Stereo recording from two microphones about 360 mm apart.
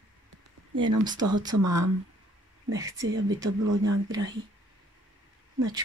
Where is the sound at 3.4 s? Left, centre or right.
Right.